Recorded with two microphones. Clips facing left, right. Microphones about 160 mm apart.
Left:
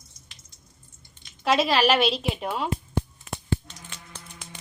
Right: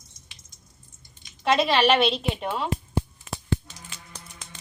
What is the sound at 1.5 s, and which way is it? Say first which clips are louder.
Speech: right 1 dB; centre (ahead or behind).